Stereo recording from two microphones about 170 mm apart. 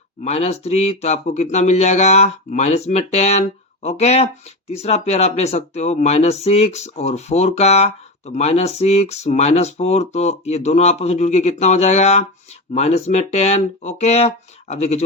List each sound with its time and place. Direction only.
0.3 s speech: 40° left (ahead or behind)